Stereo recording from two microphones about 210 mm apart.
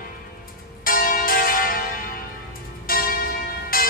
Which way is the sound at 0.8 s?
45° left (ahead or behind).